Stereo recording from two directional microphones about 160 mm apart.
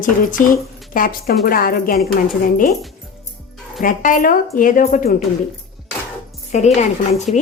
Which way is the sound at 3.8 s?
55° left (ahead or behind).